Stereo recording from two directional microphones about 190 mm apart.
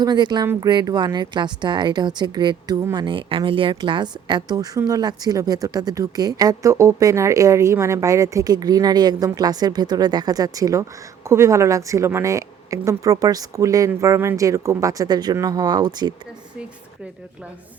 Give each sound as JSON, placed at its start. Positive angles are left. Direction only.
{"t": 0.0, "sound": "a woman's voice", "side_deg": -20}